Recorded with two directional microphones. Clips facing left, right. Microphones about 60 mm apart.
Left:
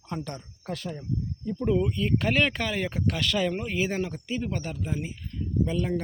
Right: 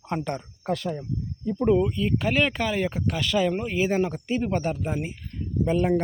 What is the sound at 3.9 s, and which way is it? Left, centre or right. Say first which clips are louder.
Speech: right 6 dB; right.